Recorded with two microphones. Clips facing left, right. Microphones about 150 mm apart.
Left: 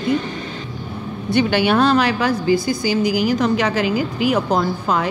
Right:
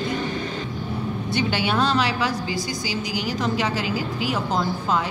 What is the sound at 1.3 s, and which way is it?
A woman's voice, 60° left (ahead or behind).